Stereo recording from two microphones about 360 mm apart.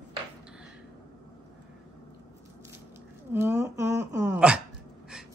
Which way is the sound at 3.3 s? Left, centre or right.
Centre.